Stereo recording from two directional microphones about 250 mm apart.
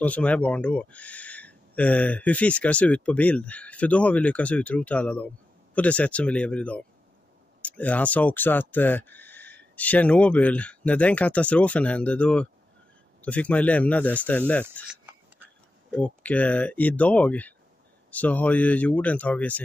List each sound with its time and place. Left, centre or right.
0.0 s speech: centre